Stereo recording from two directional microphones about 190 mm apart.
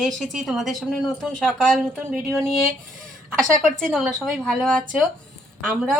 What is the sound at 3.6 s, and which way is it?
A woman's voice, 5° left (ahead or behind).